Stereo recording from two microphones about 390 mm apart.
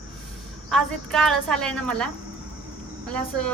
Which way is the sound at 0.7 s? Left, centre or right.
Centre.